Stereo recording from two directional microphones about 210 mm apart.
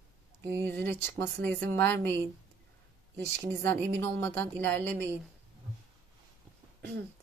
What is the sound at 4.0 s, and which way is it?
Speech, 10° left (ahead or behind).